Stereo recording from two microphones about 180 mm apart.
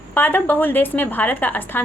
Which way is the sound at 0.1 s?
10° left (ahead or behind).